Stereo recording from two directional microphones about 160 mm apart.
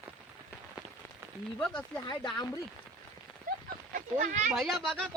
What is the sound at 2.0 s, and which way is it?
Speech, 25° left (ahead or behind).